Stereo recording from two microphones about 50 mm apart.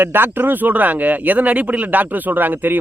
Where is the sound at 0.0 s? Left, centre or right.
Right.